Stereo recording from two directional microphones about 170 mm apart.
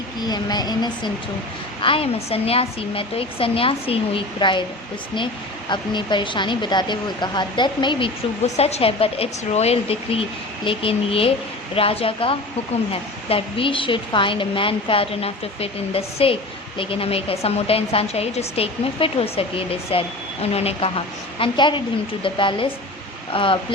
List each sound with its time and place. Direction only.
0.2 s a woman's voice: 25° left (ahead or behind)
5.7 s a woman's voice: 25° left (ahead or behind)